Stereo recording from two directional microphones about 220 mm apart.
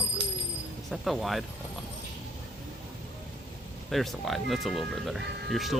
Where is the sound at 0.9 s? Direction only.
Centre (ahead or behind).